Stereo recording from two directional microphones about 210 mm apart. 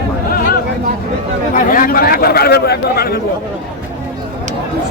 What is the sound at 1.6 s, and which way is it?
Speech, 40° left (ahead or behind).